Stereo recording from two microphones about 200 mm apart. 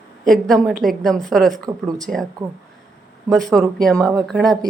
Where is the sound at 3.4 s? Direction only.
Centre (ahead or behind).